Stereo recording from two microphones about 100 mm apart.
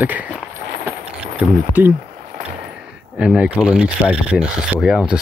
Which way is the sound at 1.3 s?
15° right (ahead or behind).